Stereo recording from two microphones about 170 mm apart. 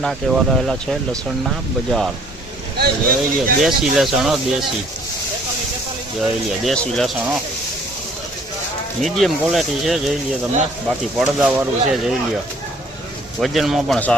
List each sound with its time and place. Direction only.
0.0 s speech: centre (ahead or behind)
2.7 s speech: 65° right (ahead or behind)
3.6 s speech: centre (ahead or behind)
6.7 s speech: 5° left (ahead or behind)
9.0 s speech: centre (ahead or behind)
13.4 s speech: centre (ahead or behind)